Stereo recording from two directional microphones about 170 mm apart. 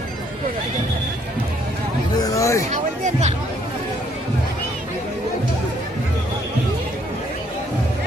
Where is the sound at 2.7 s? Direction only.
45° right (ahead or behind).